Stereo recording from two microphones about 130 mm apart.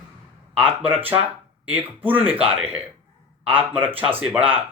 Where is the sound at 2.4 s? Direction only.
45° right (ahead or behind).